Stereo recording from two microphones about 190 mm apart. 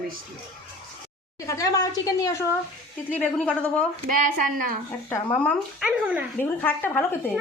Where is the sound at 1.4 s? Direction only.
20° left (ahead or behind).